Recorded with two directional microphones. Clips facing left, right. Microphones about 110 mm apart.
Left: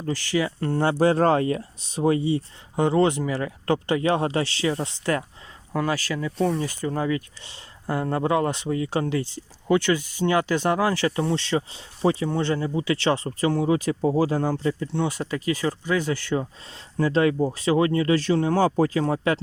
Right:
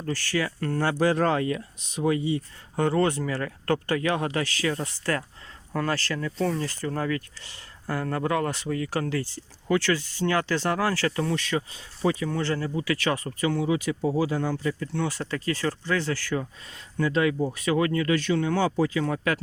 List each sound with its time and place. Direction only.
0.0 s speech: 15° left (ahead or behind)
2.7 s speech: 20° left (ahead or behind)
4.0 s speech: 30° left (ahead or behind)